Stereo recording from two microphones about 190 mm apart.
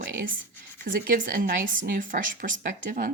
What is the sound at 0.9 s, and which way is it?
Speech, 45° right (ahead or behind).